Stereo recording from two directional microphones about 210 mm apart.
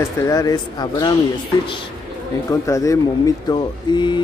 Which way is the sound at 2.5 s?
15° left (ahead or behind).